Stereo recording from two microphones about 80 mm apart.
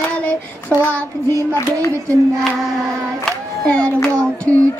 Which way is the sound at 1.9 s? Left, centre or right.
Right.